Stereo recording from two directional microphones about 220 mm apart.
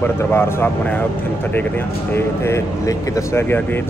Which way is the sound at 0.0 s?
10° left (ahead or behind).